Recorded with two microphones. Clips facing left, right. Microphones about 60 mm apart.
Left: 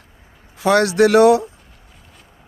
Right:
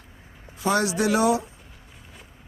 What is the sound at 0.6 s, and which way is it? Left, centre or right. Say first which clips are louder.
Speech: left 9 dB; left.